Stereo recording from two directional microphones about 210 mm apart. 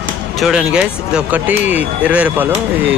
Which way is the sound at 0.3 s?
Centre (ahead or behind).